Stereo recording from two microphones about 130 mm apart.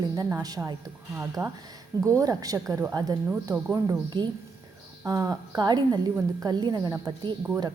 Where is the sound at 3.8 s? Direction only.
35° right (ahead or behind).